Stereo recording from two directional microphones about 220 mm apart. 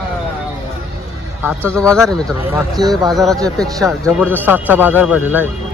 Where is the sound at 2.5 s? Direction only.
15° right (ahead or behind).